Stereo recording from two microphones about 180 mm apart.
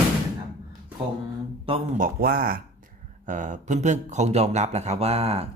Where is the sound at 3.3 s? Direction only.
45° right (ahead or behind).